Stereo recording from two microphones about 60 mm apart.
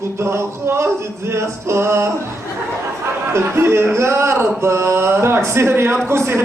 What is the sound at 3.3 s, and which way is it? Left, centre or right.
Speech, right.